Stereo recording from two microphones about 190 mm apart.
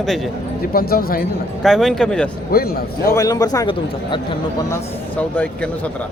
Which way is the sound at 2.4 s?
50° left (ahead or behind).